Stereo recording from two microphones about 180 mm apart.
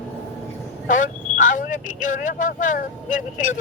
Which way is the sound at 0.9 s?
45° left (ahead or behind).